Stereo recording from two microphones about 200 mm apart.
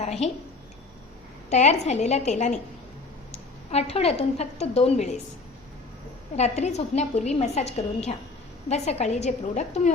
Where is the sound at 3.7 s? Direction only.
30° left (ahead or behind).